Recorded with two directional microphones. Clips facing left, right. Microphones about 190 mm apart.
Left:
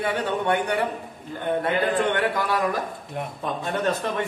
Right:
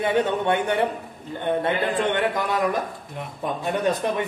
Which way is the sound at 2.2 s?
20° right (ahead or behind).